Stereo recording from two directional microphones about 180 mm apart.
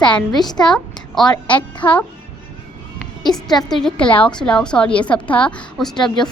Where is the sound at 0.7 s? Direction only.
5° left (ahead or behind).